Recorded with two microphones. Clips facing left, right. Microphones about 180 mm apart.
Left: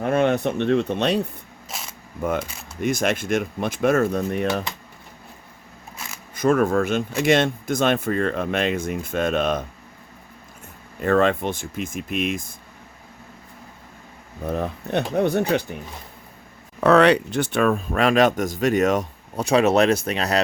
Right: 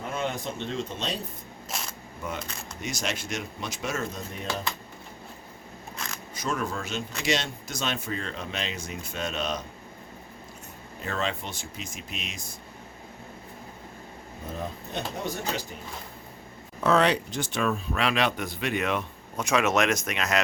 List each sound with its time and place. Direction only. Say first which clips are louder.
0.0 s speech: left 12 dB; 60° left (ahead or behind)
1.7 s single-lens reflex camera: even; 5° left (ahead or behind)
2.2 s speech: left 10 dB; 55° left (ahead or behind)
6.0 s single-lens reflex camera: even; 5° left (ahead or behind)
6.3 s speech: left 13 dB; 55° left (ahead or behind)
11.0 s speech: left 12 dB; 55° left (ahead or behind)
14.4 s speech: left 9 dB; 65° left (ahead or behind)
16.8 s speech: left 7 dB; 65° left (ahead or behind); by 20.4 s 35° left (ahead or behind)